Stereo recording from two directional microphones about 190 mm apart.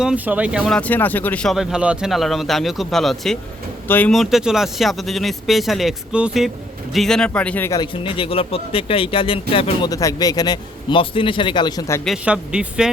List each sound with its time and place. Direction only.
0.0 s speech: 5° right (ahead or behind)
0.8 s speech: 10° left (ahead or behind)
7.8 s speech: 25° left (ahead or behind)
12.0 s speech: 5° right (ahead or behind)